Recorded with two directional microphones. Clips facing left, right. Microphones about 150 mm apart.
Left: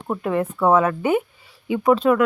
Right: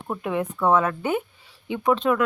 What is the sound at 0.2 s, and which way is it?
Speech, centre (ahead or behind).